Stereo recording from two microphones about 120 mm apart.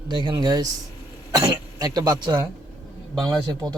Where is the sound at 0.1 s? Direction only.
35° right (ahead or behind).